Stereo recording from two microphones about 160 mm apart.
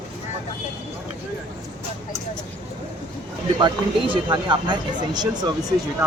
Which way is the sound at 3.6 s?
30° right (ahead or behind).